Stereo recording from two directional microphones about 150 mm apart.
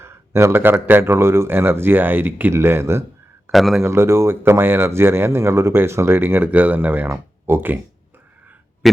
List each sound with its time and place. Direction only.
0.0 s speech: 15° right (ahead or behind)
3.5 s speech: centre (ahead or behind)
3.8 s speech: 15° right (ahead or behind)